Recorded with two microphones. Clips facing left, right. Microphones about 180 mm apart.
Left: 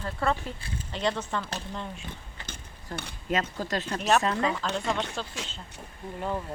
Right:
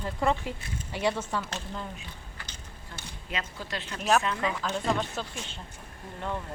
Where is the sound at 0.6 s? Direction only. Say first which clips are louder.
Left 1 dB; 30° left (ahead or behind).